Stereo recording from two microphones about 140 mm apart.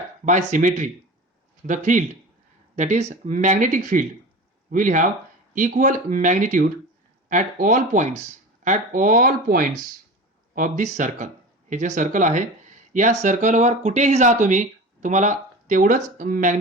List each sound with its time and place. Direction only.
0.3 s speech: 65° right (ahead or behind); by 9.6 s 80° right
10.5 s speech: 70° right (ahead or behind)